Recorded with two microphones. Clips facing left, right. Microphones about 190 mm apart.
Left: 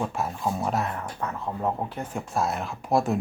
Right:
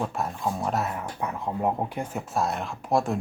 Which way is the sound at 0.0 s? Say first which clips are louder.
Even; centre (ahead or behind).